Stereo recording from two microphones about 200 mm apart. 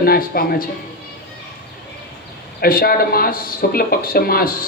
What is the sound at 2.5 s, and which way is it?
A man's voice, 50° left (ahead or behind).